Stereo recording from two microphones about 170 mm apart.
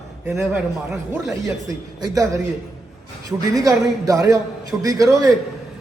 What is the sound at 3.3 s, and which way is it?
Speech, 20° right (ahead or behind).